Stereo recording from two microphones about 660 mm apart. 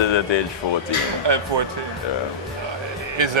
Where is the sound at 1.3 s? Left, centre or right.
Right.